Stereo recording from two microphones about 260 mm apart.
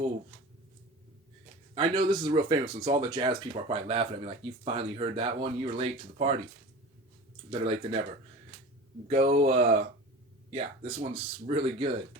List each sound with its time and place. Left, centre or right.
1.7 s speech: centre
7.6 s speech: right
9.0 s speech: right